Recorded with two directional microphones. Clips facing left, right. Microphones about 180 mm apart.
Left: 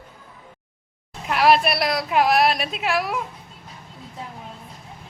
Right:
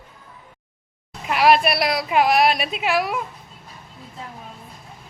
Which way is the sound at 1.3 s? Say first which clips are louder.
Right 1 dB; centre (ahead or behind).